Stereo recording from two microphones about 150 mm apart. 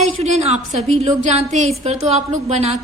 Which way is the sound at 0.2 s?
45° right (ahead or behind).